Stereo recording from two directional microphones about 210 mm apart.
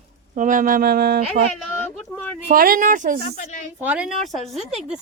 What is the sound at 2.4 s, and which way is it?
Speech, 40° right (ahead or behind).